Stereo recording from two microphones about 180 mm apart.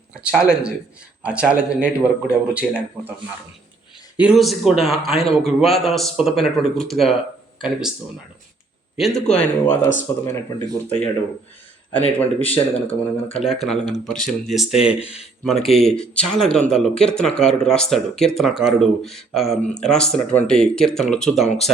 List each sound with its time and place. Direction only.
0.1 s speech: 5° right (ahead or behind)
4.2 s speech: centre (ahead or behind)
9.0 s speech: centre (ahead or behind)
13.3 s speech: centre (ahead or behind)